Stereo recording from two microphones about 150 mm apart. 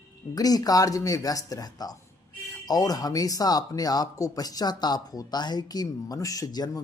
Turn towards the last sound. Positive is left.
turn(degrees=25)  # may be behind; listen again after turning